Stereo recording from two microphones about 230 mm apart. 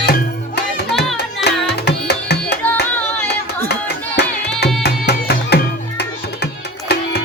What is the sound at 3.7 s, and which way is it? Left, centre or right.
Hands, left.